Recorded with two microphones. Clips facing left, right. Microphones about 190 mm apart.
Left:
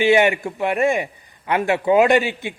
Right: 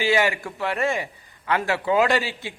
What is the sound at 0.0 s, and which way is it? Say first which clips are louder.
A man's voice: left 6 dB; 20° left (ahead or behind).